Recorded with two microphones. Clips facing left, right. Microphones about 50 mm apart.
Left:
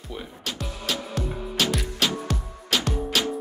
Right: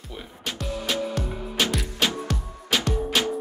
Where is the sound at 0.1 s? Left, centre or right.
Centre.